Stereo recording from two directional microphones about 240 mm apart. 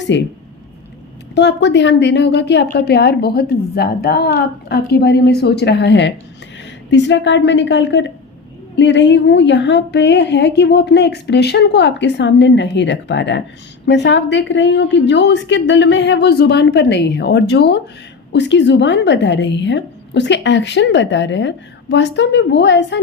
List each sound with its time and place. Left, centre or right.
0.1 s a woman's voice: left
1.4 s a woman's voice: left